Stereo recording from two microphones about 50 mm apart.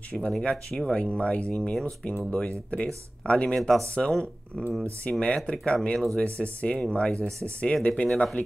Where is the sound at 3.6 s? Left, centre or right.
Centre.